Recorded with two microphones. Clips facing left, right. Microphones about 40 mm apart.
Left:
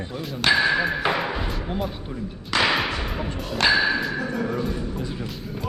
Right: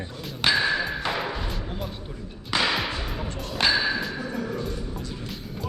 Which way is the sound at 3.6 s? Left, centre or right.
Centre.